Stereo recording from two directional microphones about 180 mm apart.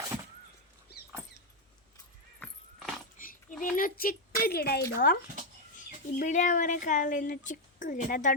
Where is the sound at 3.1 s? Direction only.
50° left (ahead or behind).